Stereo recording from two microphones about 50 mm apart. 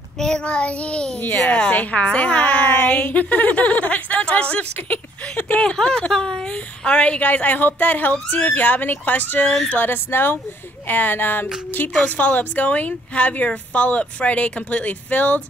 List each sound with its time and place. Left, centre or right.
0.2 s a woman's voice: centre
7.2 s speech: left
9.8 s speech: left